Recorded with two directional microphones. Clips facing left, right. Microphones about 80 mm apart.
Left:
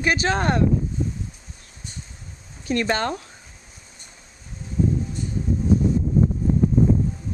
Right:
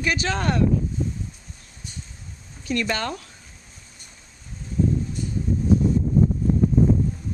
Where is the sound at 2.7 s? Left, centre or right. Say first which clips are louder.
Left 3 dB; left.